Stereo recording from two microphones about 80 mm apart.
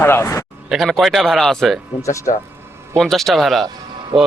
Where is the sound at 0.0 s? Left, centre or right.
Left.